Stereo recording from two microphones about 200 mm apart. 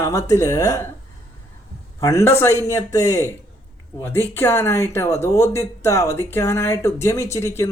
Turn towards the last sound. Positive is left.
turn(degrees=15)  # may be behind; listen again after turning